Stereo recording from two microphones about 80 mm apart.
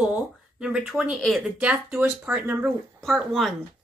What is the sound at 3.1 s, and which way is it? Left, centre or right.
Speech, centre.